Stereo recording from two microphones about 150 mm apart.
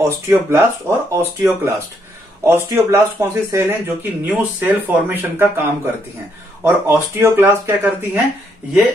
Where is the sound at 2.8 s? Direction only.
20° right (ahead or behind).